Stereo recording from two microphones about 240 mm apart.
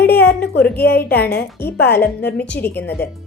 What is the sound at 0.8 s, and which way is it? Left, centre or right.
A woman's voice, left.